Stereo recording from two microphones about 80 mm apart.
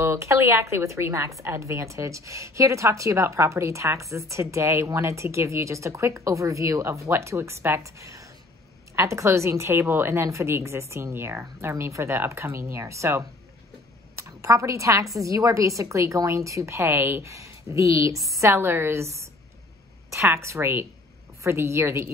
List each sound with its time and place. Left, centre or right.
0.0 s a woman's voice: right
18.5 s a woman's voice: right